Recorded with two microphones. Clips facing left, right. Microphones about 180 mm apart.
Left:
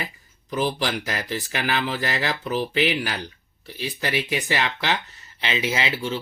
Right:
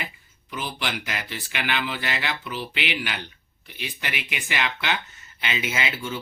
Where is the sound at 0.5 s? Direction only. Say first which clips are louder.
Left 7 dB; 40° left (ahead or behind).